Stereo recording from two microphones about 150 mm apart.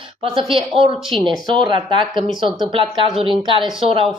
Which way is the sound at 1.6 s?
30° right (ahead or behind).